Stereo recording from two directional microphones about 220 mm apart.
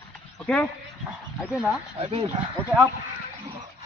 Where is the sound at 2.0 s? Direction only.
25° right (ahead or behind).